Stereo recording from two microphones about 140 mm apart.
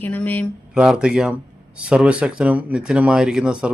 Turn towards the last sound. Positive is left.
turn(degrees=-5)  # may be behind; listen again after turning